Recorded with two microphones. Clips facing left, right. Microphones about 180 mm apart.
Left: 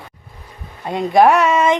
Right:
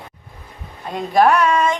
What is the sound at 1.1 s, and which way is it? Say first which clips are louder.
Speech: left 2 dB; 20° left (ahead or behind).